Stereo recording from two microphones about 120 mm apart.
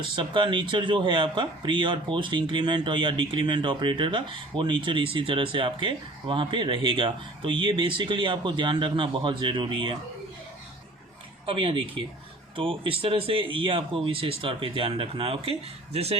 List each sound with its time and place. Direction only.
0.2 s speech: 45° right (ahead or behind)
11.4 s speech: 45° right (ahead or behind)